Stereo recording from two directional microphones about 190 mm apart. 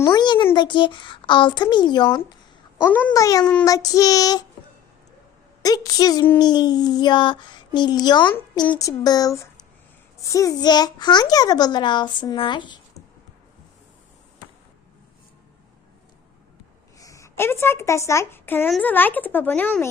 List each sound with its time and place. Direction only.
0.0 s a child's voice: 20° left (ahead or behind)
2.8 s a child's voice: 10° left (ahead or behind)
5.6 s a child's voice: 20° left (ahead or behind)
17.0 s speech: 15° left (ahead or behind)